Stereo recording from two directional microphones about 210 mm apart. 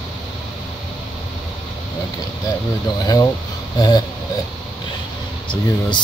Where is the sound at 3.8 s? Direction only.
20° left (ahead or behind).